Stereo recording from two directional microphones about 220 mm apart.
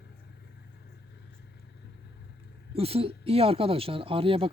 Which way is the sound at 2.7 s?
25° right (ahead or behind).